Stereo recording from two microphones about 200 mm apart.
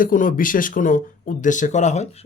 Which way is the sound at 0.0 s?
40° left (ahead or behind).